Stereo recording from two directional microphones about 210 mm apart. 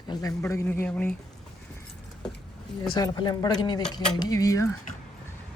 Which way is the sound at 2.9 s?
20° left (ahead or behind).